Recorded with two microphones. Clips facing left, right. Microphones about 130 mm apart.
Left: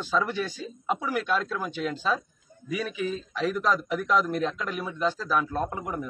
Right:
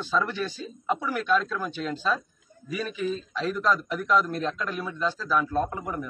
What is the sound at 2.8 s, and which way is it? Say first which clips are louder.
A man's voice: right 2 dB; 15° left (ahead or behind).